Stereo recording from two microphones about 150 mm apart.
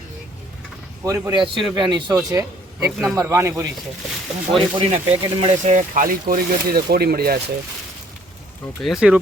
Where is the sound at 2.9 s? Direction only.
Centre (ahead or behind).